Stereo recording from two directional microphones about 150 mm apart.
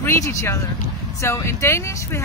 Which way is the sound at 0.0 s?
20° left (ahead or behind).